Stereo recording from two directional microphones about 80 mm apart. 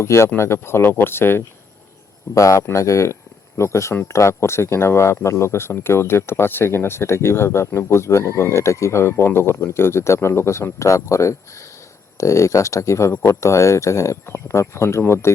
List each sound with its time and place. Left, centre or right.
0.0 s speech: left
2.3 s speech: left